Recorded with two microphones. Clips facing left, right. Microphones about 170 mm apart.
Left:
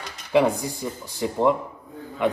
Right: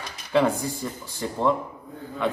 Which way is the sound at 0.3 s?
15° left (ahead or behind).